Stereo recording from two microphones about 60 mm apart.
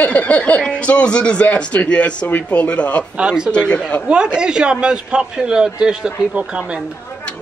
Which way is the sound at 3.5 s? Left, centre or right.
Centre.